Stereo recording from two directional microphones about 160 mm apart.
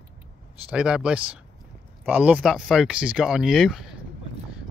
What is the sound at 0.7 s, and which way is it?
Speech, 5° right (ahead or behind).